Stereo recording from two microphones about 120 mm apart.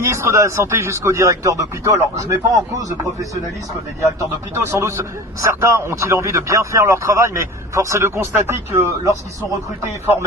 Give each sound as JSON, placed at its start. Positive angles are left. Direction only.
{"t": 0.0, "sound": "a man's voice", "side_deg": -20}
{"t": 4.5, "sound": "a man's voice", "side_deg": -20}